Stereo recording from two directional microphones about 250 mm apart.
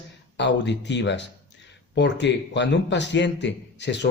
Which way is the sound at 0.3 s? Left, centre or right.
Left.